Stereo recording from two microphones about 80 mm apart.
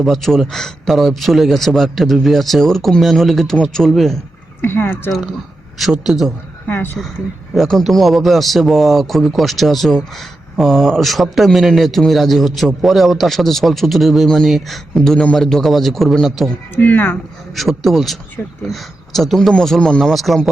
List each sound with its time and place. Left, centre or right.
0.0 s speech: centre
4.6 s speech: left
5.8 s speech: centre
6.7 s speech: left
7.5 s speech: centre
16.7 s speech: left
17.5 s speech: centre